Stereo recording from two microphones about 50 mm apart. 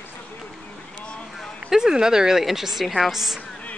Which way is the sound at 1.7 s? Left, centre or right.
Centre.